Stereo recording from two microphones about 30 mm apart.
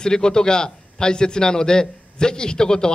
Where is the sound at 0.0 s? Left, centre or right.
Left.